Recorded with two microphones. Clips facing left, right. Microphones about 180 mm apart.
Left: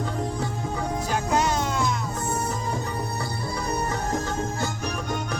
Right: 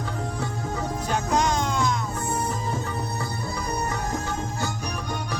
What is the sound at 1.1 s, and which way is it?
Music, 5° left (ahead or behind).